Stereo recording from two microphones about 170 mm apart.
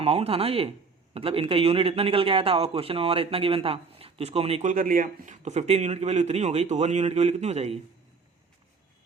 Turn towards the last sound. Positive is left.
turn(degrees=-40)  # may be behind; listen again after turning